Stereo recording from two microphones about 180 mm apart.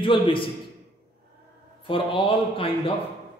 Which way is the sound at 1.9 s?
30° left (ahead or behind).